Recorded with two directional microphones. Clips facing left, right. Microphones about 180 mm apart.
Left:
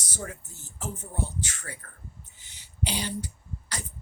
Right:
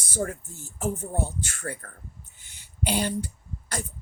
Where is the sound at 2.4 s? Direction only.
50° right (ahead or behind).